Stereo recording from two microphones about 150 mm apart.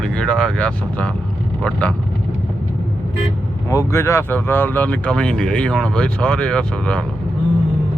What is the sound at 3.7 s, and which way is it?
Speech, 20° left (ahead or behind).